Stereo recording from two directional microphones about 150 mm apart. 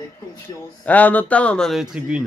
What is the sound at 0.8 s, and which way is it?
Speech, 10° left (ahead or behind).